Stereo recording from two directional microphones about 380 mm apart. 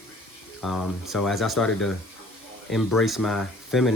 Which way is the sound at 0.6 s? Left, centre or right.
Centre.